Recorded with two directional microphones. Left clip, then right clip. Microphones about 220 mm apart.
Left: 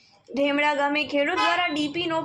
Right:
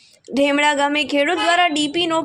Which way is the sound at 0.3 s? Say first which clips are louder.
Right 6 dB; 50° right (ahead or behind).